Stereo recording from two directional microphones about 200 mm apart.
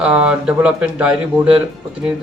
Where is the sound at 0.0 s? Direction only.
5° right (ahead or behind).